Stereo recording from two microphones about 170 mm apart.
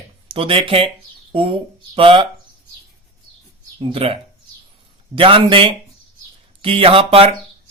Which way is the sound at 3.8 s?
30° right (ahead or behind).